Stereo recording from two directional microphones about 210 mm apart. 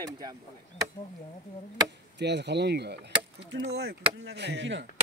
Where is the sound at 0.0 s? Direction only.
15° right (ahead or behind).